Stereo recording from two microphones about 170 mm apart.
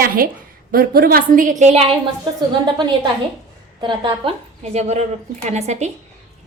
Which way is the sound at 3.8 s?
30° right (ahead or behind).